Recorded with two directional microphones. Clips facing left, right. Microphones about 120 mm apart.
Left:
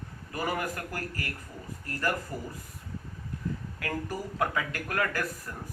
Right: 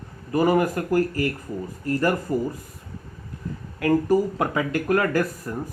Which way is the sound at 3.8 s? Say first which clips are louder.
Right 16 dB; 25° right (ahead or behind).